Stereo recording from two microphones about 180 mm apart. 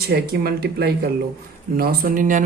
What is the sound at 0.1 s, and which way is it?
A woman's voice, 60° right (ahead or behind).